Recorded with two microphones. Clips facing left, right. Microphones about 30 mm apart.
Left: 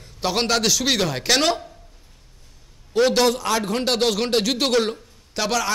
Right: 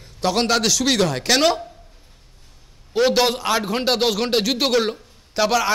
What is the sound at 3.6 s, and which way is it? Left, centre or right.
A man's voice, centre.